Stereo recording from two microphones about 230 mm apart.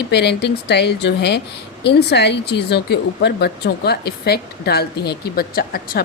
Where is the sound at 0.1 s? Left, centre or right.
Left.